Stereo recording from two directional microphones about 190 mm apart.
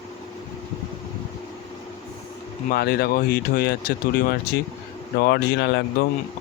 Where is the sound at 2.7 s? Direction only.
55° left (ahead or behind).